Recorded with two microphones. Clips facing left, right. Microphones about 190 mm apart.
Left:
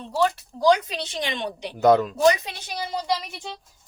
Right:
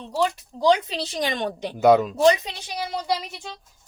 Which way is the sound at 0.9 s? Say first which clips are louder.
Right 3 dB; 35° right (ahead or behind).